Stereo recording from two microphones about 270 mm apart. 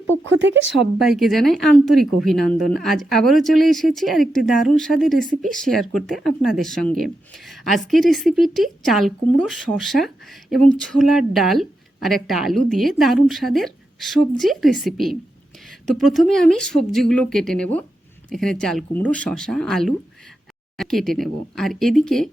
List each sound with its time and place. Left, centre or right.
0.3 s speech: right
0.8 s speech: centre